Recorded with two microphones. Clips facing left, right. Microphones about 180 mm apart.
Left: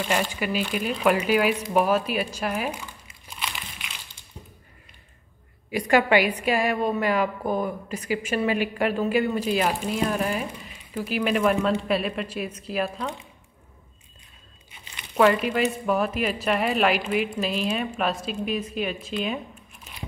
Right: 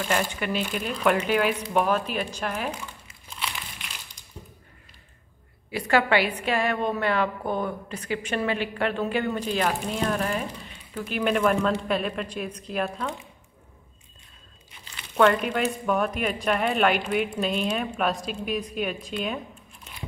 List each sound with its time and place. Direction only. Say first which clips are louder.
0.0 s a woman's voice: left 1 dB; 10° left (ahead or behind)
4.2 s a sound: even; 40° right (ahead or behind)
5.7 s a woman's voice: left 2 dB; 15° left (ahead or behind)
15.1 s a woman's voice: left 1 dB; 5° left (ahead or behind)